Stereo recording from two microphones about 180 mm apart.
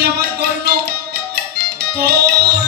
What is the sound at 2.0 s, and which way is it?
Music, 60° right (ahead or behind).